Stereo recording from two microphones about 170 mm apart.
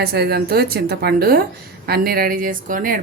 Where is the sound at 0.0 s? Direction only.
65° right (ahead or behind).